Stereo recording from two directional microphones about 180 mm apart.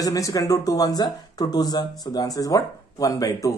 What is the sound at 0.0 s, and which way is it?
Speech, 20° left (ahead or behind).